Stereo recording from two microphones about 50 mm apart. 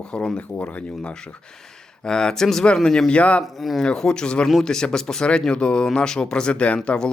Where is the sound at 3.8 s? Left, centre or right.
Centre.